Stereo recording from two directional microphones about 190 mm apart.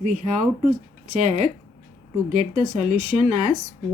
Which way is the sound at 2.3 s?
40° right (ahead or behind).